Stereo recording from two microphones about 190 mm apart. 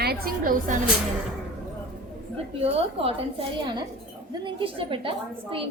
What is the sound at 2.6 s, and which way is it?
Speech, 30° right (ahead or behind).